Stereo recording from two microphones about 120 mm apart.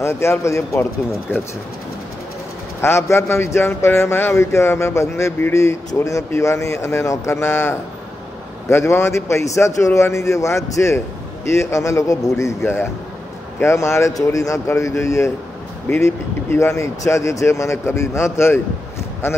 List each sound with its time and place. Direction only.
0.0 s a man's voice: 20° left (ahead or behind)
2.8 s a man's voice: 20° left (ahead or behind)